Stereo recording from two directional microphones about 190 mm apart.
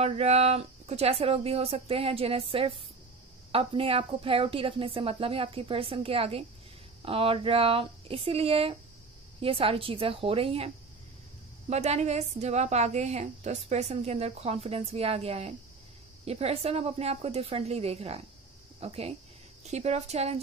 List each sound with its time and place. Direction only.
0.0 s a woman's voice: 35° right (ahead or behind)
11.7 s a woman's voice: 35° right (ahead or behind)